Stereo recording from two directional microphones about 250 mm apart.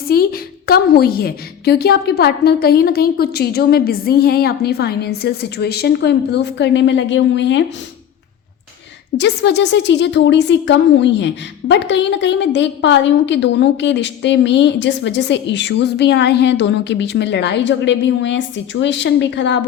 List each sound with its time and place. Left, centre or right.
0.1 s a woman's voice: left
9.1 s a woman's voice: left